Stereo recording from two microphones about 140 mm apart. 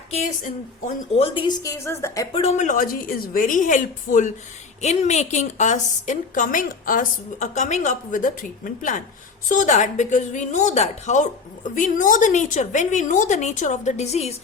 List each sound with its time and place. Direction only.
0.1 s a woman's voice: 55° left (ahead or behind)
1.2 s a woman's voice: 35° left (ahead or behind); by 2.2 s 20° left (ahead or behind)
2.3 s a woman's voice: 50° left (ahead or behind); by 4.3 s 65° left (ahead or behind)
4.8 s a woman's voice: 55° left (ahead or behind)
11.7 s a woman's voice: 70° left (ahead or behind); by 14.3 s 50° left (ahead or behind)